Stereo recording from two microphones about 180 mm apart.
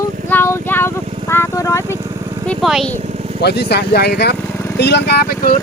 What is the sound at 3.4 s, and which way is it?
Speech, 65° left (ahead or behind).